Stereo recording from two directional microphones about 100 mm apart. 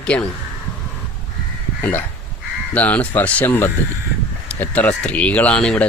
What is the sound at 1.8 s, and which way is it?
Speech, 20° left (ahead or behind).